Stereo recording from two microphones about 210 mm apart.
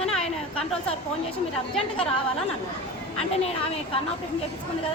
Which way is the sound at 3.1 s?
30° left (ahead or behind).